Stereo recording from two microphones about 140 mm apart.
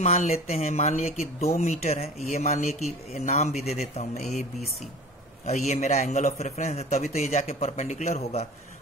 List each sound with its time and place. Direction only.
0.0 s speech: 50° left (ahead or behind)